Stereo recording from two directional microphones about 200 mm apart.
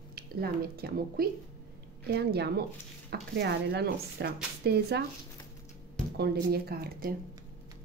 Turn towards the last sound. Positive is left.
turn(degrees=-50)  # may be behind; listen again after turning